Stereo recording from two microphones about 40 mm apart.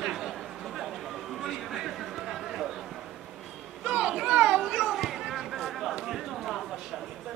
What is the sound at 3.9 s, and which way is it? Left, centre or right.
Children playing, right.